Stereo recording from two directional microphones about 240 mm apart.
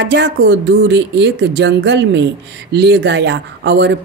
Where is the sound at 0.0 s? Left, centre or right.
Right.